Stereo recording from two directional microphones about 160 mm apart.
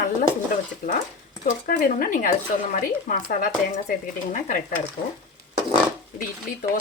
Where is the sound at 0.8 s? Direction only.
60° left (ahead or behind).